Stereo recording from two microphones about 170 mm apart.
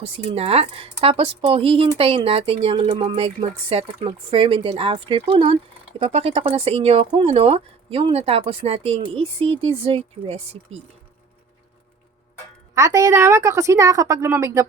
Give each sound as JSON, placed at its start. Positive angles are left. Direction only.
{"t": 0.0, "sound": "speech", "side_deg": -35}
{"t": 12.7, "sound": "a woman's voice", "side_deg": -20}